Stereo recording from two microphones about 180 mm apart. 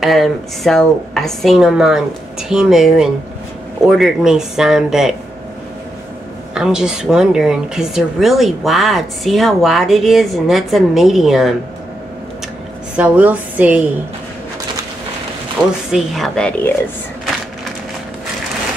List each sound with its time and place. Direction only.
0.0 s speech: centre (ahead or behind)
6.5 s speech: 5° right (ahead or behind)
12.9 s a woman's voice: 5° right (ahead or behind)
15.9 s speech: 5° left (ahead or behind)